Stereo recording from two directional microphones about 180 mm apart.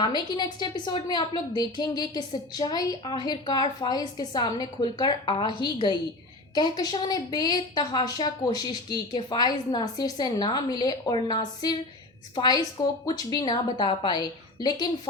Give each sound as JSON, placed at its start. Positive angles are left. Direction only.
{"t": 0.0, "sound": "a woman's voice", "side_deg": 25}